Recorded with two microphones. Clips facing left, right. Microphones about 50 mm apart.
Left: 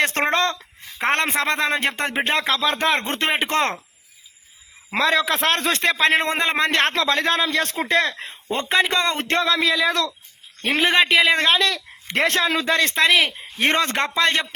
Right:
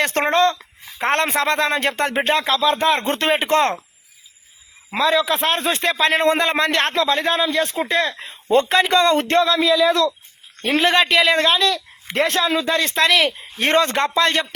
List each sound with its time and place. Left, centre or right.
0.0 s speech: left
2.4 s speech: left
4.9 s a man's voice: left
5.8 s a man's voice: left
7.9 s a man's voice: left
8.4 s a man's voice: left
10.8 s a man's voice: left
11.3 s a man's voice: left
13.0 s a man's voice: left
13.6 s speech: left